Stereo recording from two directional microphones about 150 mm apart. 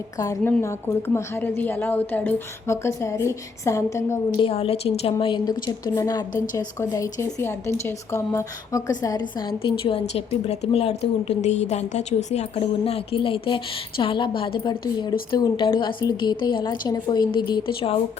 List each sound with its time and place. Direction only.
0.2 s a woman's voice: 20° left (ahead or behind)
4.4 s a woman's voice: 40° left (ahead or behind)
5.2 s a woman's voice: 30° left (ahead or behind)